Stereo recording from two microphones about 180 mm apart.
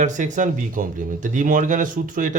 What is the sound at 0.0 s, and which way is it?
Speech, 45° right (ahead or behind).